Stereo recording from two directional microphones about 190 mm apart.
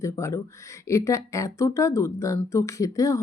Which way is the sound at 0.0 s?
15° left (ahead or behind).